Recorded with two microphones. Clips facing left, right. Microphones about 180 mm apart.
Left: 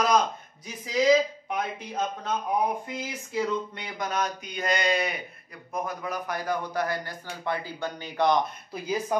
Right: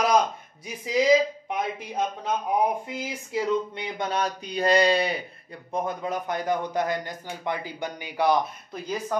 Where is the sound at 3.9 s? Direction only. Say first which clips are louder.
Right 1 dB; 30° right (ahead or behind); by 8.4 s 10° right (ahead or behind).